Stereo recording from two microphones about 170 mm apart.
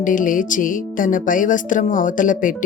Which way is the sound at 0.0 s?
50° left (ahead or behind).